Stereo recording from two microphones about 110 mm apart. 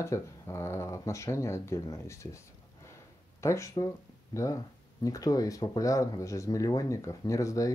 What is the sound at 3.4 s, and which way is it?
Speech, 25° left (ahead or behind).